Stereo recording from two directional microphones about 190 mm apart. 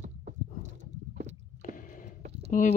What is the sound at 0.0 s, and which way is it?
Clip-clop, 40° right (ahead or behind).